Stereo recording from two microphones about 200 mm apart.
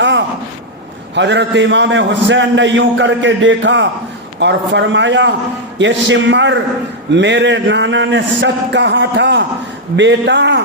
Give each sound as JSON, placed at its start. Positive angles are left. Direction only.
{"t": 1.1, "sound": "a man's voice", "side_deg": -60}